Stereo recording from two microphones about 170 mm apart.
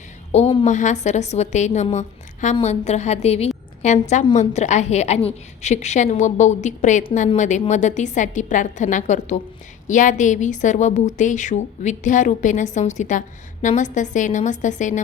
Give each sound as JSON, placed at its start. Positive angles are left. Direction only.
{"t": 0.3, "sound": "a woman's voice", "side_deg": 40}